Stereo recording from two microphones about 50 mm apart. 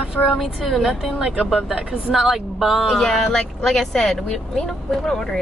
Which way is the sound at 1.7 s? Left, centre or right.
Centre.